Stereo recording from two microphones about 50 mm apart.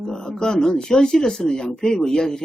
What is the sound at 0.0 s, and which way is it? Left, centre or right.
Speech, centre.